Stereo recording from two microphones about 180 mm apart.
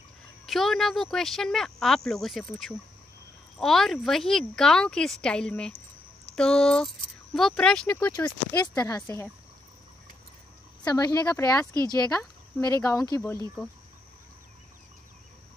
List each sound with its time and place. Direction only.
0.5 s speech: centre (ahead or behind)
8.5 s speech: 20° left (ahead or behind)
10.8 s speech: 20° left (ahead or behind)